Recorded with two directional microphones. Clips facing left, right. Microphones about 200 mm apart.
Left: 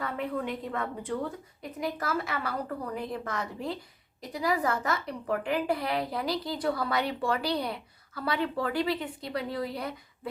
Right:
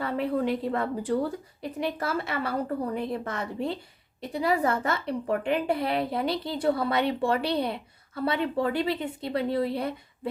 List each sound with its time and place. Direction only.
0.0 s a woman's voice: 30° right (ahead or behind)